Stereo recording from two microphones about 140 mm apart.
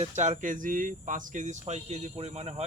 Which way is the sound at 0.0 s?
60° right (ahead or behind).